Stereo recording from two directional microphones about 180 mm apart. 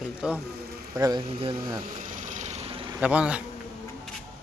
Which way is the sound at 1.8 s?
45° right (ahead or behind).